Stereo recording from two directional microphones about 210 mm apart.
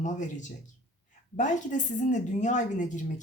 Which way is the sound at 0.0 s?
35° left (ahead or behind).